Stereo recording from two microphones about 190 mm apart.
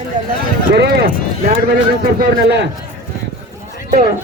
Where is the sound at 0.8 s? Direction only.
60° right (ahead or behind).